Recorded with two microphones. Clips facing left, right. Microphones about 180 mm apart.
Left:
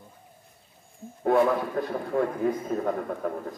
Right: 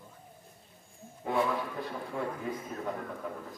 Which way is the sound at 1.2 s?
50° left (ahead or behind).